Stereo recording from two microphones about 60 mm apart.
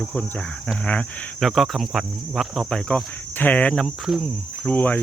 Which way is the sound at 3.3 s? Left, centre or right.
Left.